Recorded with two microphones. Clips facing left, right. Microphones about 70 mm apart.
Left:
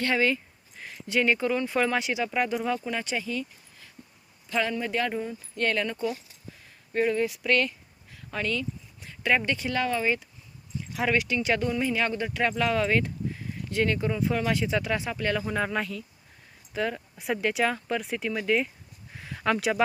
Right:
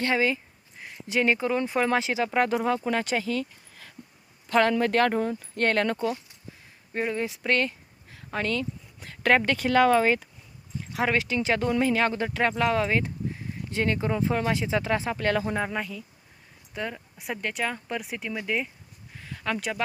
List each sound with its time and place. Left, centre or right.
0.0 s speech: right
4.4 s speech: right
4.7 s speech: right
6.9 s speech: right
9.7 s speech: right
10.9 s speech: right
11.7 s speech: right
15.7 s speech: centre
19.1 s a sound: centre